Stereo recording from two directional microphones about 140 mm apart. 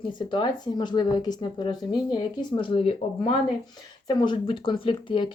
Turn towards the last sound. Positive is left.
turn(degrees=35)  # may be behind; listen again after turning